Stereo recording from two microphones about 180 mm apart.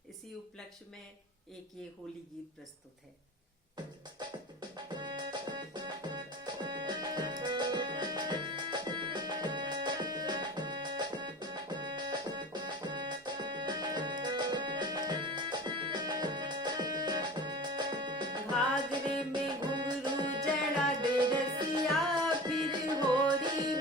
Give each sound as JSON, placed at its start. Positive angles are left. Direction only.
{"t": 4.2, "sound": "music", "side_deg": -25}